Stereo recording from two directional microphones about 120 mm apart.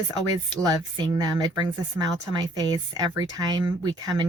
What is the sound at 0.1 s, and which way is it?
Speech, 40° right (ahead or behind).